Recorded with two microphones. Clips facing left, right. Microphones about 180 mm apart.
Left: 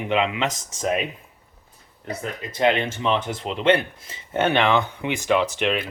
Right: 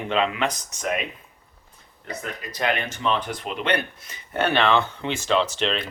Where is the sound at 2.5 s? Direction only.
25° left (ahead or behind).